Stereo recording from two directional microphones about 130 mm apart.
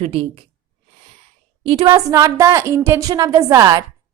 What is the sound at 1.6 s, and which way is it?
Speech, 40° right (ahead or behind).